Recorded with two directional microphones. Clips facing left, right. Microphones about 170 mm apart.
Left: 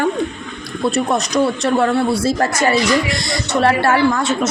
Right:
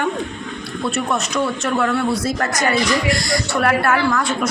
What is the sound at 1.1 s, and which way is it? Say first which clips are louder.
A woman's voice: left 4 dB; 35° left (ahead or behind).